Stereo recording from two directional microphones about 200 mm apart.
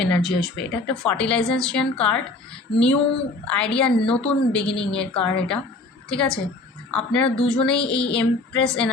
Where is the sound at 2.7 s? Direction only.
55° left (ahead or behind).